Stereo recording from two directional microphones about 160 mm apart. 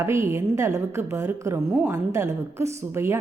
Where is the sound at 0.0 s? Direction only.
15° right (ahead or behind).